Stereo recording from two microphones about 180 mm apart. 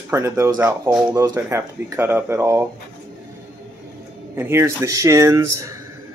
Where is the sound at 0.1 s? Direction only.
15° right (ahead or behind).